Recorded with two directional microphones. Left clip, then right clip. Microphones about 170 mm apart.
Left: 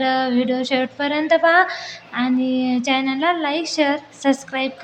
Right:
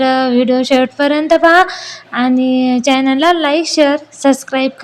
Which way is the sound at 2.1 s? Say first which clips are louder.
Right 7 dB; 45° right (ahead or behind).